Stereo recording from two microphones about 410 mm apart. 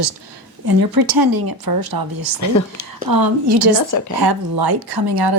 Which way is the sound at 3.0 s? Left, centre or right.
Right.